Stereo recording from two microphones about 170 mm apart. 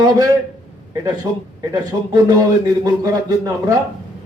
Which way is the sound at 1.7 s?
25° right (ahead or behind).